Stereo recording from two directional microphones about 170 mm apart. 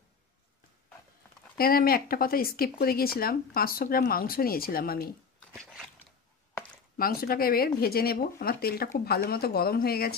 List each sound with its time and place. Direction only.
1.6 s speech: 60° left (ahead or behind)
5.5 s biting: 5° left (ahead or behind)
7.0 s speech: 60° left (ahead or behind)